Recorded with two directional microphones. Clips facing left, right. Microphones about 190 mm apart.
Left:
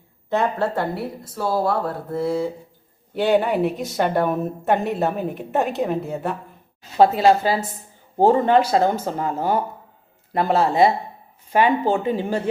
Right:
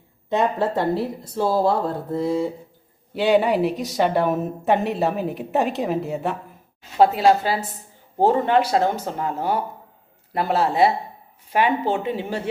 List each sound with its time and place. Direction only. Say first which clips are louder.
0.3 s speech: even; 20° right (ahead or behind)
3.2 s a woman's voice: right 1 dB; centre (ahead or behind)